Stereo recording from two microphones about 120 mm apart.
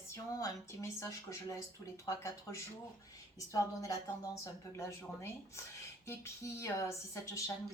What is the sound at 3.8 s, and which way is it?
Speech, 25° left (ahead or behind).